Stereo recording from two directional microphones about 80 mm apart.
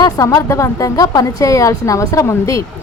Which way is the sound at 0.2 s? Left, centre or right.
Left.